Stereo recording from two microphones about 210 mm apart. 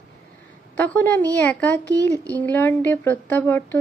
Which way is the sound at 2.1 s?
15° right (ahead or behind).